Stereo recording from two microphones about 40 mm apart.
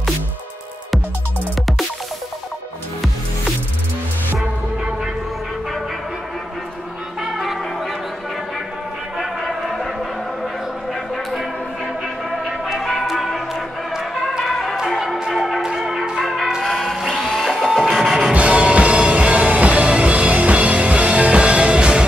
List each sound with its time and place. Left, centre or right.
1.5 s music: centre
7.2 s music: centre
9.2 s a sound: centre
12.7 s music: centre
17.3 s printer: centre
17.9 s music: centre
18.3 s music: right